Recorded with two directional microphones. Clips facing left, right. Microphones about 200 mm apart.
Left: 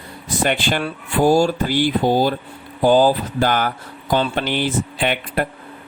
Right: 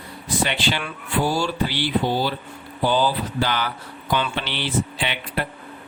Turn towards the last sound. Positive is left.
turn(degrees=50)  # may be behind; listen again after turning